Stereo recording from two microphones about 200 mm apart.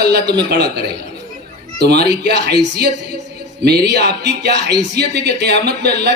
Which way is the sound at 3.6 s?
55° right (ahead or behind).